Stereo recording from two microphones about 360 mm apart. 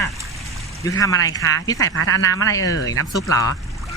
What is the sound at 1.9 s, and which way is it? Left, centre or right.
Speech, left.